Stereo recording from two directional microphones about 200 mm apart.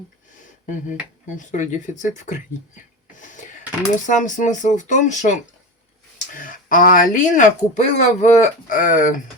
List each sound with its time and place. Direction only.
1.4 s speech: 40° left (ahead or behind)
3.2 s a sound: 40° left (ahead or behind)
4.0 s speech: 40° left (ahead or behind)